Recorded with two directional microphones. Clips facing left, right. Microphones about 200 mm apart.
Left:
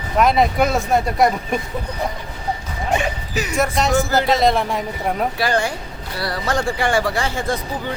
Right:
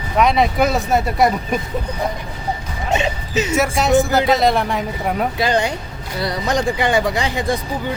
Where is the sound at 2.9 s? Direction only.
25° right (ahead or behind).